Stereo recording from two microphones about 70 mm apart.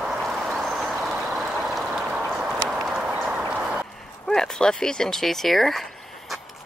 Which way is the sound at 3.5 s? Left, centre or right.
Centre.